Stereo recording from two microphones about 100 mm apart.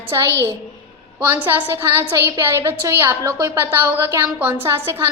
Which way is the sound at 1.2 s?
20° right (ahead or behind).